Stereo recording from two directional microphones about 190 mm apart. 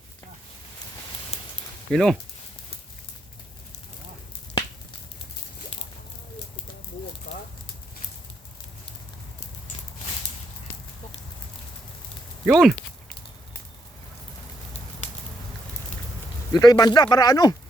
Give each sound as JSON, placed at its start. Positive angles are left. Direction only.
{"t": 1.9, "sound": "speech", "side_deg": 0}
{"t": 12.5, "sound": "speech", "side_deg": 0}
{"t": 16.5, "sound": "speech", "side_deg": 20}